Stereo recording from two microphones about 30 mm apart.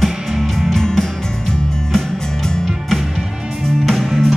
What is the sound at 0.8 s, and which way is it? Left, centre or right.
Music, centre.